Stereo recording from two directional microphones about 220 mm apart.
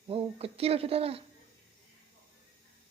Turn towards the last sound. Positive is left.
turn(degrees=-25)  # may be behind; listen again after turning